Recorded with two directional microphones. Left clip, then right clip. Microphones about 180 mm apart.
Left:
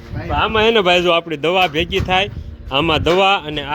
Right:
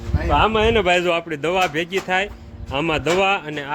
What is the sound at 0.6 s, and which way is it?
Speech, 20° left (ahead or behind).